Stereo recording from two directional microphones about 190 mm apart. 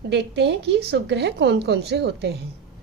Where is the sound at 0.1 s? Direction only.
65° right (ahead or behind).